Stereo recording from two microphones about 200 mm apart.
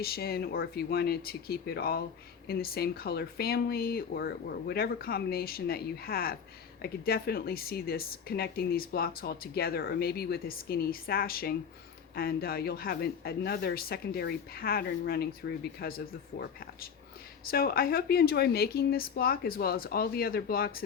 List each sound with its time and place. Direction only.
0.0 s speech: 50° left (ahead or behind)